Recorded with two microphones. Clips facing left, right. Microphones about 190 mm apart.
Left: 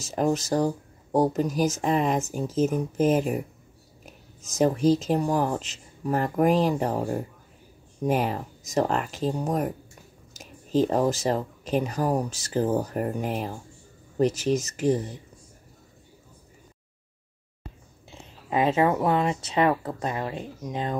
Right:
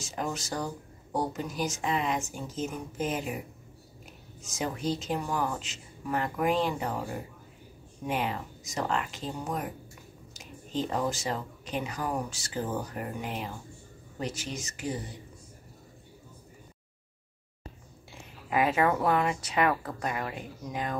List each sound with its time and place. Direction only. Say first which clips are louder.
0.0 s speech: left 10 dB; 40° left (ahead or behind)
18.5 s speech: left 3 dB; 25° left (ahead or behind)